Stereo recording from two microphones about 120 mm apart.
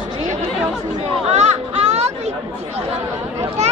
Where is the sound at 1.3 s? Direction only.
70° right (ahead or behind).